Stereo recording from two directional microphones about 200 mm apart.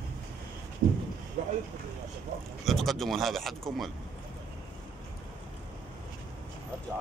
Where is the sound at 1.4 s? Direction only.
35° right (ahead or behind).